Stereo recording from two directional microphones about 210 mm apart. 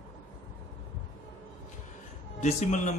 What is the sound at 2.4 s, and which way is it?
Speech, 35° left (ahead or behind).